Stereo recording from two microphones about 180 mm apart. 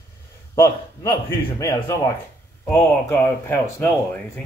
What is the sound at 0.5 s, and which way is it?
A man's voice, 20° left (ahead or behind).